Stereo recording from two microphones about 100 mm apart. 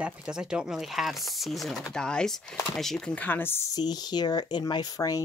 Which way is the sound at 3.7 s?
45° left (ahead or behind).